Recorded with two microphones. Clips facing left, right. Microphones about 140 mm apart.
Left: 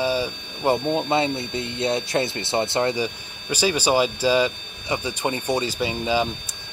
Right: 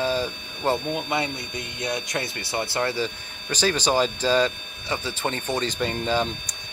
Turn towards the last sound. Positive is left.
turn(degrees=5)  # may be behind; listen again after turning